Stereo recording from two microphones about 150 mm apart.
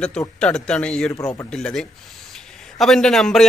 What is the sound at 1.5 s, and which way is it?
A man's voice, 5° left (ahead or behind).